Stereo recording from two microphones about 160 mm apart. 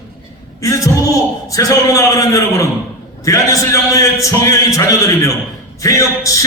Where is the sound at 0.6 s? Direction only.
20° left (ahead or behind).